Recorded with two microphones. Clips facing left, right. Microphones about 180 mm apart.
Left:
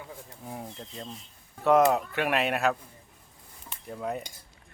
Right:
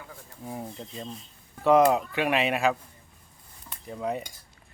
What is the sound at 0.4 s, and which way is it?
Speech, 5° right (ahead or behind).